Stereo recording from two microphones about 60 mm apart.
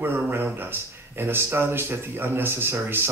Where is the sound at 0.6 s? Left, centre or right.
Right.